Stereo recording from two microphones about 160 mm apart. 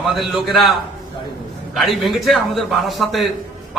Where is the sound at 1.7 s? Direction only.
Centre (ahead or behind).